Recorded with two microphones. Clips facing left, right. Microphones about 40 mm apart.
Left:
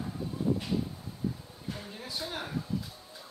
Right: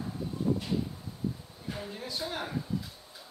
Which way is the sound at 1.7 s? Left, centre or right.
Centre.